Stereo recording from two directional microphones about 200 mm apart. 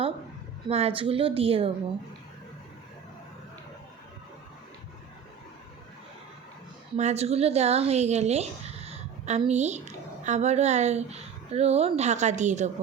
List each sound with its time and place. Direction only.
0.7 s speech: 30° right (ahead or behind)
6.9 s speech: 35° right (ahead or behind)